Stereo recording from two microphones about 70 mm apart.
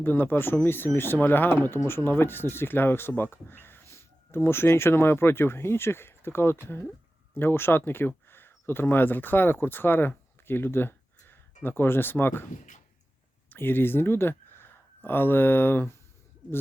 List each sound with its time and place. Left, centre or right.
0.0 s speech: left
13.5 s speech: left